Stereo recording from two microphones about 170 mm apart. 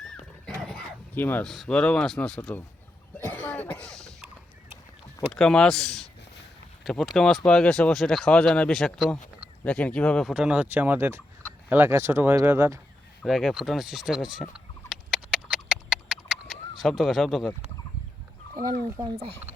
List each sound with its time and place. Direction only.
0.0 s dog: 5° left (ahead or behind)
1.5 s speech: centre (ahead or behind)
3.2 s cough: 10° left (ahead or behind)
5.3 s speech: 5° left (ahead or behind); by 12.8 s 15° right (ahead or behind)
13.2 s speech: centre (ahead or behind)
14.5 s a sound: 5° right (ahead or behind)
16.8 s speech: centre (ahead or behind)
18.9 s speech: 20° right (ahead or behind)